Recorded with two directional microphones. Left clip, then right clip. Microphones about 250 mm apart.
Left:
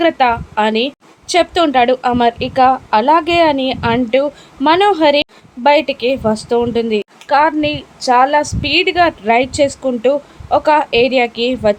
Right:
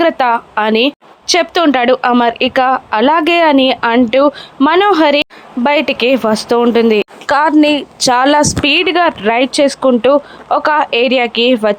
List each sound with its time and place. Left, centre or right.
0.0 s a woman's voice: centre